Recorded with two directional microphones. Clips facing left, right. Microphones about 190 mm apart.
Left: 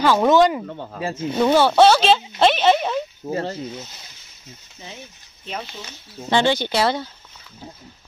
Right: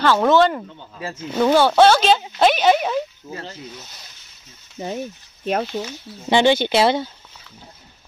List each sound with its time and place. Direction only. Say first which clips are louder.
0.0 s speech: even; 10° left (ahead or behind)
0.7 s speech: left 7 dB; 75° left (ahead or behind)
1.4 s speech: right 1 dB; centre (ahead or behind)
3.3 s speech: left 8 dB; 35° left (ahead or behind)
4.7 s speech: right 13 dB; 50° right (ahead or behind)
6.3 s speech: right 3 dB; 20° right (ahead or behind)